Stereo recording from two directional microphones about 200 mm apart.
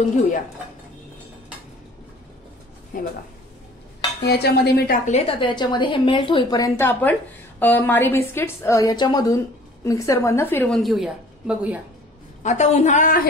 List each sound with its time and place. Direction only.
2.9 s speech: 45° left (ahead or behind)
4.2 s speech: 55° left (ahead or behind)
5.1 s a woman's voice: 30° left (ahead or behind); by 11.8 s 5° right (ahead or behind)
12.4 s a woman's voice: 35° left (ahead or behind)